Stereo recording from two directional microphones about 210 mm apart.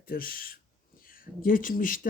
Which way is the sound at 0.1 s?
45° left (ahead or behind).